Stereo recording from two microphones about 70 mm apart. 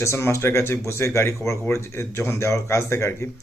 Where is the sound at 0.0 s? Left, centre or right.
Left.